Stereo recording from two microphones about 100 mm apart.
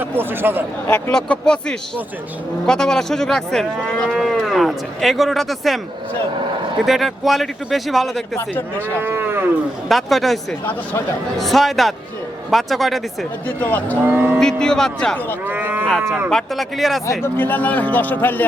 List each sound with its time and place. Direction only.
0.0 s speech: 20° right (ahead or behind)
0.9 s a man's voice: 15° left (ahead or behind)
2.6 s cattle: 5° left (ahead or behind)
6.8 s cattle: centre (ahead or behind)
9.0 s cattle: 20° right (ahead or behind)
9.9 s cattle: centre (ahead or behind)
13.6 s a man's voice: 15° left (ahead or behind)
14.0 s cattle: 20° right (ahead or behind)
14.3 s speech: 5° left (ahead or behind)
15.4 s cattle: 20° right (ahead or behind)
15.9 s cattle: 5° left (ahead or behind)
17.3 s a man's voice: 20° left (ahead or behind)